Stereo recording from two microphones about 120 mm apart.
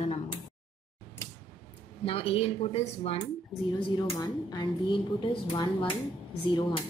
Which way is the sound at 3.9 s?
35° left (ahead or behind).